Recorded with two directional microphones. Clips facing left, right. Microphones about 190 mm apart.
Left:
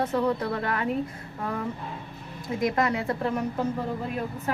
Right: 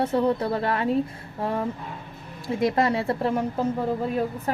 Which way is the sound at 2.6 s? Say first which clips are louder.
Right 3 dB; 30° right (ahead or behind).